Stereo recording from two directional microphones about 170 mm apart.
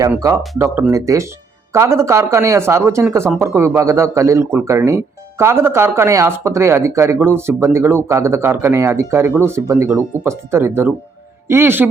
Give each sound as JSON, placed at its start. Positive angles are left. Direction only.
{"t": 0.6, "sound": "speech", "side_deg": -15}